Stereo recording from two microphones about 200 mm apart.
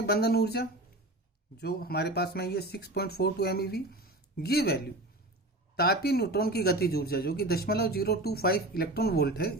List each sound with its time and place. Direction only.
0.0 s speech: 50° left (ahead or behind)